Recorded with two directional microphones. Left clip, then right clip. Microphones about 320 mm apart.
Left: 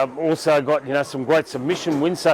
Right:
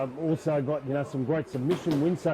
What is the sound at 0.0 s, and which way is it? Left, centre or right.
A man's voice, centre.